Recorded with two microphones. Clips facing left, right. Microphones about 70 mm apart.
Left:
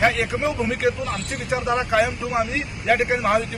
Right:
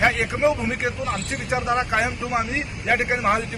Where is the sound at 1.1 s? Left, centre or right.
Centre.